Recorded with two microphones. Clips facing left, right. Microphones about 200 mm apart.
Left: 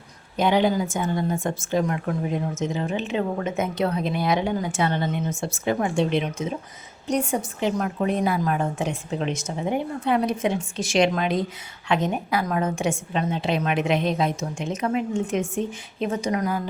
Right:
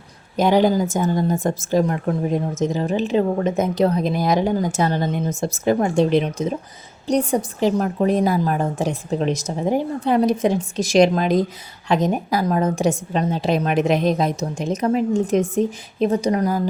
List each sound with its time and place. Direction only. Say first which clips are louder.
0.3 s speech: right 4 dB; 40° right (ahead or behind)